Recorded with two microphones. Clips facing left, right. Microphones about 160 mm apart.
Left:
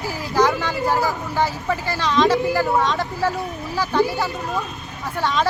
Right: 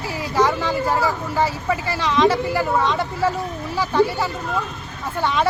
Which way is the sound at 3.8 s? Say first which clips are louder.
Right 1 dB; centre (ahead or behind).